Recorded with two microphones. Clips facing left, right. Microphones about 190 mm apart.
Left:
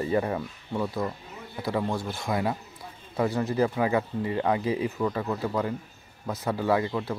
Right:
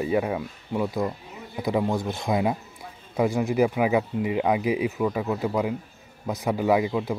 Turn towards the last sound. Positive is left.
turn(degrees=-15)  # may be behind; listen again after turning